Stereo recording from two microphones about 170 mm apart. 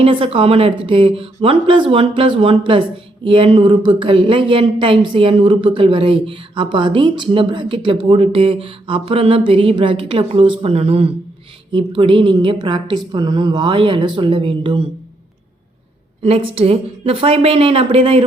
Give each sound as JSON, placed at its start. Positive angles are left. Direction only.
{"t": 0.0, "sound": "a woman's voice", "side_deg": -30}
{"t": 16.2, "sound": "speech", "side_deg": -35}